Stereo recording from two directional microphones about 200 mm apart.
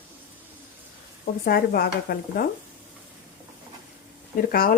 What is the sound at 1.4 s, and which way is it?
Speech, 50° left (ahead or behind).